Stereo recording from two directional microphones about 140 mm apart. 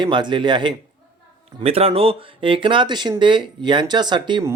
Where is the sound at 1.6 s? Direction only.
45° right (ahead or behind).